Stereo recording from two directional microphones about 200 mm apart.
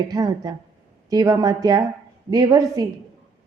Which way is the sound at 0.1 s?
20° right (ahead or behind).